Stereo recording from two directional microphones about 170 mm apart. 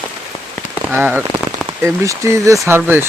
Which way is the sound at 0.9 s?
10° right (ahead or behind).